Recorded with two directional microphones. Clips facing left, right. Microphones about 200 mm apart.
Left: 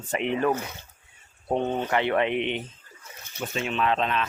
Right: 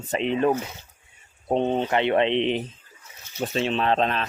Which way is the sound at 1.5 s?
20° right (ahead or behind).